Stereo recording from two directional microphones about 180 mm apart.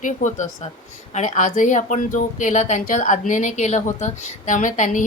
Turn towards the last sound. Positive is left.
turn(degrees=45)  # may be behind; listen again after turning